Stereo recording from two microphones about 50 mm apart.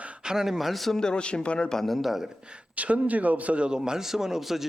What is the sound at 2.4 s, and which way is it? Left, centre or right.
A man's voice, right.